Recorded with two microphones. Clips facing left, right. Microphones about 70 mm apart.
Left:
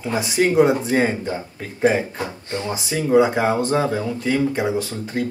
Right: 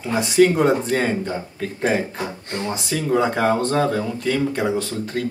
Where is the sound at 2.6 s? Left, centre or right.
Centre.